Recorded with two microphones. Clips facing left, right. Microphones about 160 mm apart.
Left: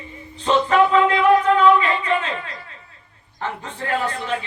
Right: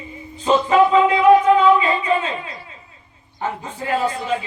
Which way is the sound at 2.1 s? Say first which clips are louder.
Right 2 dB; 15° right (ahead or behind).